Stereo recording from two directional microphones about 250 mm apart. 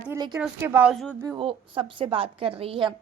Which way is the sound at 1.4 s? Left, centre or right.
Right.